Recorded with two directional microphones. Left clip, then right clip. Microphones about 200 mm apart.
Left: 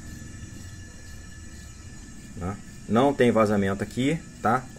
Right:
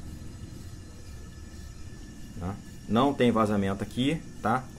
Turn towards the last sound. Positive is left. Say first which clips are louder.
# left 4 dB
turn(degrees=35)  # may be behind; listen again after turning